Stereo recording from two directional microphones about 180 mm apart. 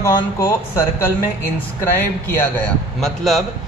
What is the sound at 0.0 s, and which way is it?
Speech, 15° left (ahead or behind).